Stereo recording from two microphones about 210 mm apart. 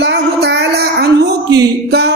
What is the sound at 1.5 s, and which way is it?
Music, 50° right (ahead or behind).